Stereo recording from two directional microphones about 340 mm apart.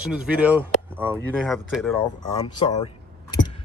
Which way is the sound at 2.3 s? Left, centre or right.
Centre.